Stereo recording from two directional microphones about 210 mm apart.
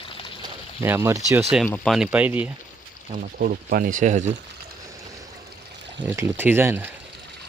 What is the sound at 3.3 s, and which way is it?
Speech, 45° right (ahead or behind).